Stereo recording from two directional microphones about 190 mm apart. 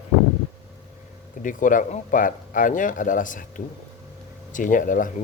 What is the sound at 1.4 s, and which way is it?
Speech, 45° left (ahead or behind).